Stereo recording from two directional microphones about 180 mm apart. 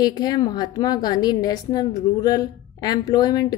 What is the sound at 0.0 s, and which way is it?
A woman's voice, 20° left (ahead or behind).